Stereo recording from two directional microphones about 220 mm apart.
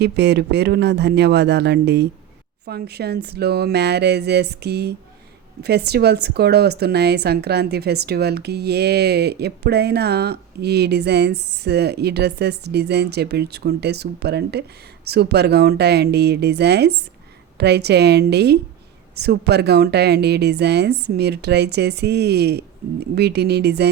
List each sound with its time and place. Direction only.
0.0 s a woman's voice: 50° right (ahead or behind)